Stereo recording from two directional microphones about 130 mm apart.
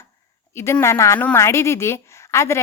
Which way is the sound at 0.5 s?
20° left (ahead or behind).